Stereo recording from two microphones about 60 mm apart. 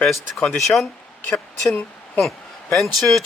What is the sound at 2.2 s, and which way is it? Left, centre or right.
Speech, centre.